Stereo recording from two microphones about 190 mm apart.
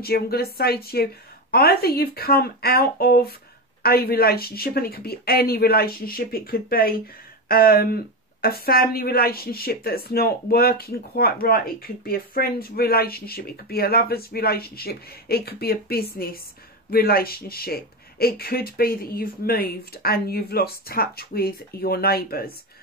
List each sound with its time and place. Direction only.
0.0 s speech: 55° left (ahead or behind)